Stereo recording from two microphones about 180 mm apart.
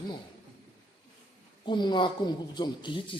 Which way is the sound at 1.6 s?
25° left (ahead or behind).